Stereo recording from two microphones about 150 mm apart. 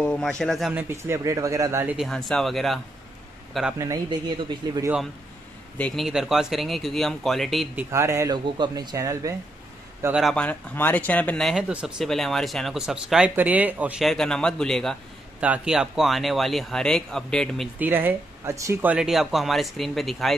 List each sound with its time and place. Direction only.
0.0 s speech: 5° left (ahead or behind)
0.7 s speech: 15° right (ahead or behind)
2.0 s speech: centre (ahead or behind)
3.7 s speech: 20° right (ahead or behind)
5.8 s speech: 5° left (ahead or behind)
7.7 s speech: 20° right (ahead or behind)
10.1 s speech: 5° left (ahead or behind)
14.0 s speech: 5° left (ahead or behind)
15.4 s speech: 5° right (ahead or behind)
17.7 s speech: 10° right (ahead or behind)